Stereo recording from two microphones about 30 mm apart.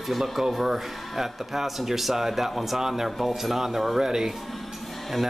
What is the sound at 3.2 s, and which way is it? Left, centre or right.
Speech, centre.